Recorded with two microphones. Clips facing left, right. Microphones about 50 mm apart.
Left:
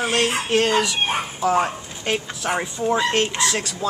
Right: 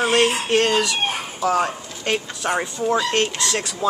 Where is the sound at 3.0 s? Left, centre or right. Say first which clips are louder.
Left 1 dB; centre.